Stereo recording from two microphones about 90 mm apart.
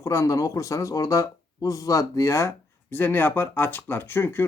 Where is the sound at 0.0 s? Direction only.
35° left (ahead or behind).